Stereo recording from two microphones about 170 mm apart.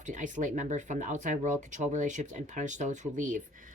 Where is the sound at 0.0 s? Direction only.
45° right (ahead or behind).